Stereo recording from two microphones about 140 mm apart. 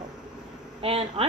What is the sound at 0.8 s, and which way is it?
Speech, 45° right (ahead or behind).